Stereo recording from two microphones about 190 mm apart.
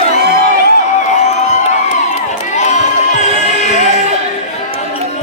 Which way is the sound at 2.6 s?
40° left (ahead or behind).